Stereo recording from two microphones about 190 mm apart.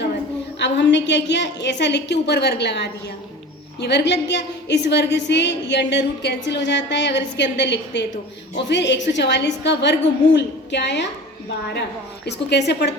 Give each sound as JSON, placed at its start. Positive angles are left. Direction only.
{"t": 0.6, "sound": "a woman's voice", "side_deg": 65}